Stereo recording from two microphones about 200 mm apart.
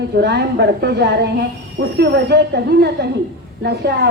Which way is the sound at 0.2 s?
60° right (ahead or behind).